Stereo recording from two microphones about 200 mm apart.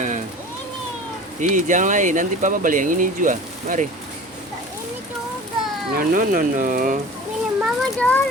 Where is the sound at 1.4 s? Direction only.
40° right (ahead or behind).